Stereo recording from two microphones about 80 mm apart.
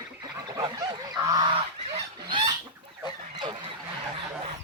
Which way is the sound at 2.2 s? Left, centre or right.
Right.